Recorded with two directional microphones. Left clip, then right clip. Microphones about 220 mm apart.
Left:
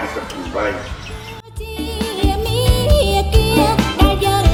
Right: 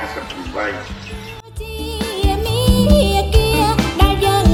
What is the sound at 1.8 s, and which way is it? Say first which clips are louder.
Music: left 1 dB; centre (ahead or behind).